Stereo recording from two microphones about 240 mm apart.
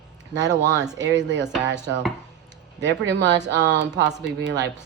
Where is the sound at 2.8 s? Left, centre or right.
Right.